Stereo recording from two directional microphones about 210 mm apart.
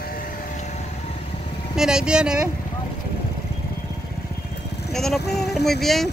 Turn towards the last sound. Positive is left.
turn(degrees=0)  # may be behind; listen again after turning